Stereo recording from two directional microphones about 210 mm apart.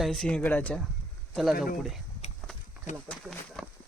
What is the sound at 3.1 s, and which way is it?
Speech, centre (ahead or behind).